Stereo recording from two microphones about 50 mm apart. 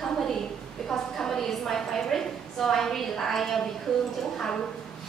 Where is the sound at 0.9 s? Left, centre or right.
Centre.